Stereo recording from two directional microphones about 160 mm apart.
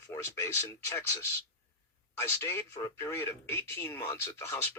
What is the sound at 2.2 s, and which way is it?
Speech, 15° left (ahead or behind).